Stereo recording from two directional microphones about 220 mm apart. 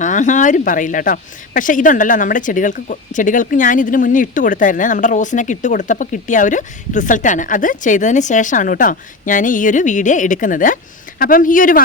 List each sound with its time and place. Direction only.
0.0 s speech: 35° left (ahead or behind)